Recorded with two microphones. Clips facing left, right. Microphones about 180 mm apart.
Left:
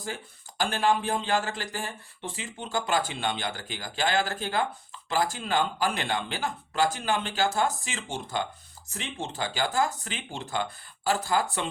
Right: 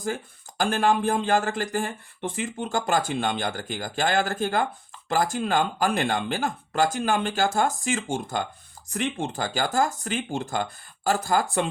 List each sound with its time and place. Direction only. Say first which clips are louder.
0.0 s speech: right 7 dB; 45° right (ahead or behind)